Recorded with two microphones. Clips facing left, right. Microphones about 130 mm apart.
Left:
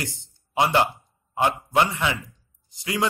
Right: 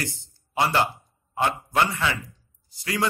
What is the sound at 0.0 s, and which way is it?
A man's voice, 20° left (ahead or behind).